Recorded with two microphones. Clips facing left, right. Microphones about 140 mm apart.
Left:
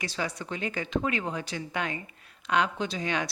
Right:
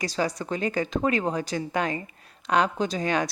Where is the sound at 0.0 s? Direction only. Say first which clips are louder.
Right 6 dB; 40° right (ahead or behind).